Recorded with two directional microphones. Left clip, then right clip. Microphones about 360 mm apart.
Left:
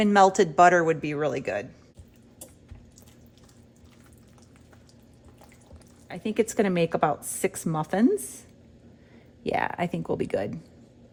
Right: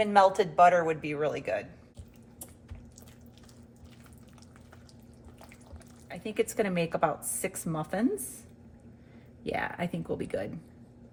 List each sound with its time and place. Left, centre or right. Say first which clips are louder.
0.0 s a woman's voice: left 3 dB; left
6.1 s a woman's voice: left 4 dB; left
9.4 s a woman's voice: left 6 dB; left